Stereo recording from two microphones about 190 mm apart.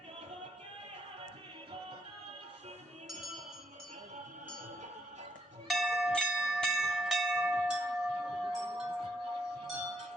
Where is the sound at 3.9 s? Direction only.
40° right (ahead or behind).